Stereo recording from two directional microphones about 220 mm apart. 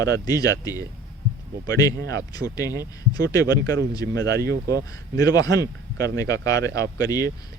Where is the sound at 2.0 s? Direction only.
50° right (ahead or behind).